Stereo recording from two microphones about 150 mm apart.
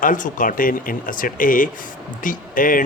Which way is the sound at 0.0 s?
60° left (ahead or behind).